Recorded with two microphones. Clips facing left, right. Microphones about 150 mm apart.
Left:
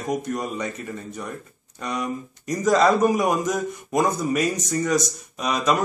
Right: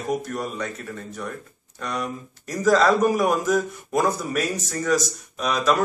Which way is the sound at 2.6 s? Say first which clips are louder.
Even; 15° left (ahead or behind).